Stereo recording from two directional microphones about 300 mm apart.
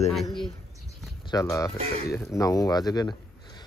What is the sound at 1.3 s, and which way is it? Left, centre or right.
Speech, centre.